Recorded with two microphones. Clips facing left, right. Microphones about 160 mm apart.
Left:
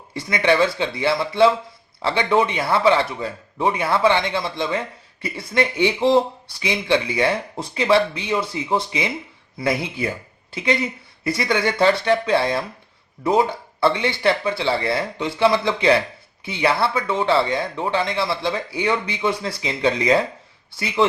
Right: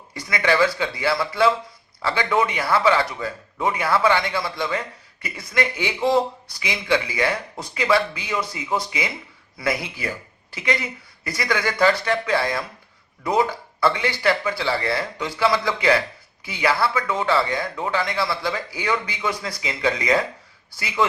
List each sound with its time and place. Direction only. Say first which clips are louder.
0.1 s speech: left 3 dB; 25° left (ahead or behind)